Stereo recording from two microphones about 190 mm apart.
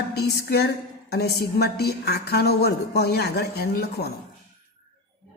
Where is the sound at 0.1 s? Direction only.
55° left (ahead or behind).